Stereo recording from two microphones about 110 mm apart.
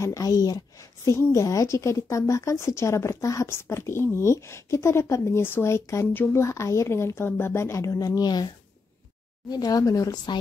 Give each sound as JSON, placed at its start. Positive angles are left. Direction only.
{"t": 0.0, "sound": "a woman's voice", "side_deg": 30}
{"t": 9.5, "sound": "speech", "side_deg": 35}